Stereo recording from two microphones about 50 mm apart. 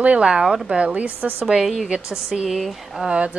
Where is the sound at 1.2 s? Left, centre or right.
Right.